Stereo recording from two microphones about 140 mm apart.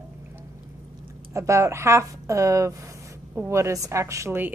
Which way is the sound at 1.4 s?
20° right (ahead or behind).